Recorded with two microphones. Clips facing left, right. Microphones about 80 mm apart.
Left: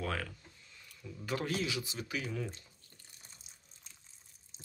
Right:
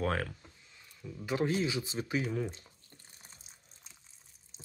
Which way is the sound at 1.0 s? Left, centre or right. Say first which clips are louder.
Right 5 dB; centre.